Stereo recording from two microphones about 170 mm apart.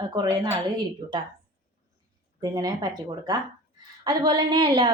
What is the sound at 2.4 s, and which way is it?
Speech, 20° right (ahead or behind).